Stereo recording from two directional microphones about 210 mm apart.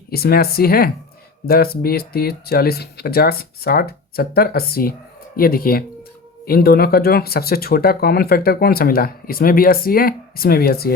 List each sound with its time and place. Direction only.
0.1 s speech: 45° left (ahead or behind)